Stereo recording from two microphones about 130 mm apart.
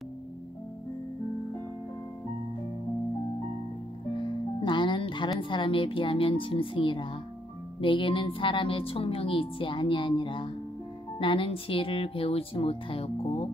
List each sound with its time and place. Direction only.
4.1 s music: 40° left (ahead or behind)
5.4 s a woman's voice: 40° left (ahead or behind)